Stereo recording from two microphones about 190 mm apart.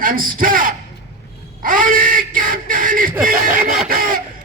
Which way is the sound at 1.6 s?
45° right (ahead or behind).